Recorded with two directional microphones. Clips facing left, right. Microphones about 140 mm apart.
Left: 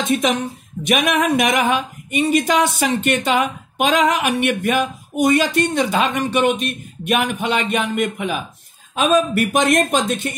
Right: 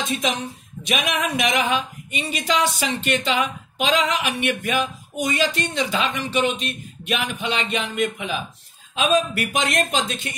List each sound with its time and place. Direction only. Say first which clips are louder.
0.1 s speech: left 6 dB; 55° left (ahead or behind)